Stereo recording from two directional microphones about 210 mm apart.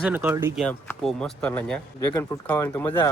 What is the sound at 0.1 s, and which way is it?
Speech, 5° right (ahead or behind).